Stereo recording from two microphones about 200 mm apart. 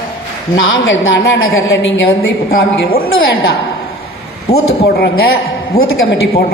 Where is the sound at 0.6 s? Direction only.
75° left (ahead or behind).